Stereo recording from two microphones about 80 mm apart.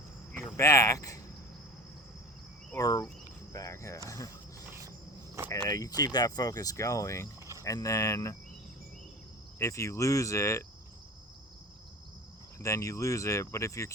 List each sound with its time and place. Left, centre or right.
0.5 s speech: left
2.7 s speech: left
3.5 s cricket: left
5.6 s speech: left
6.0 s speech: left
9.6 s speech: left
12.5 s speech: left